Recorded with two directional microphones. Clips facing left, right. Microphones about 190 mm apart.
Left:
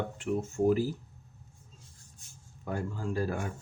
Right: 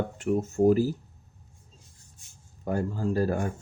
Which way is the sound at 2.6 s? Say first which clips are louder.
Right 6 dB; 40° right (ahead or behind).